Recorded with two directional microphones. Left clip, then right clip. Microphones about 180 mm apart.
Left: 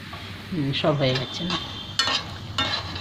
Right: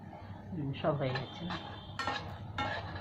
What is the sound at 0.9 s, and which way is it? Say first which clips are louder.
Speech: left 9 dB; 50° left (ahead or behind).